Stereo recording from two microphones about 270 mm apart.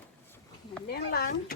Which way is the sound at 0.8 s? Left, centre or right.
Left.